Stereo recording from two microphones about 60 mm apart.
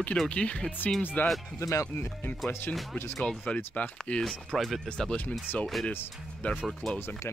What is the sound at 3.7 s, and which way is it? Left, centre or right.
Speech, centre.